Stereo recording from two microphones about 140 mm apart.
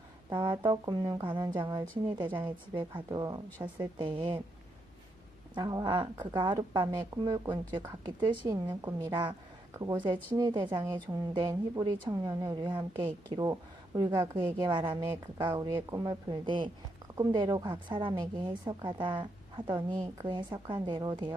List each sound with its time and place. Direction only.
0.3 s a woman's voice: 35° right (ahead or behind)
5.5 s a woman's voice: 30° right (ahead or behind)
8.6 s speech: 20° right (ahead or behind)
9.0 s a woman's voice: 35° right (ahead or behind)
15.0 s a woman's voice: 20° right (ahead or behind)